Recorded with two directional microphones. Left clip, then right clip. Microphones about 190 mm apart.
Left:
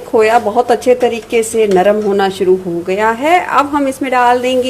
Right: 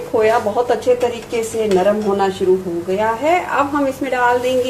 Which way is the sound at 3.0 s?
35° left (ahead or behind).